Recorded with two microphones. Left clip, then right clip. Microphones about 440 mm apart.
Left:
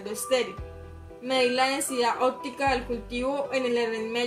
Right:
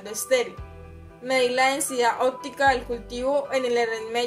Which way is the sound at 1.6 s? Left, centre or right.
Right.